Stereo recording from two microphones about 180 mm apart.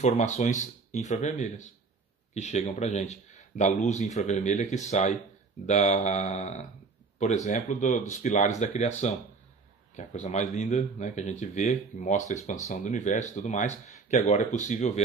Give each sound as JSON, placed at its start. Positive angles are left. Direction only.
{"t": 0.0, "sound": "speech", "side_deg": 40}